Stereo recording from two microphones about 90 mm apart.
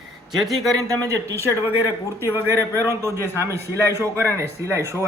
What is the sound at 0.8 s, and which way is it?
A man's voice, 40° right (ahead or behind).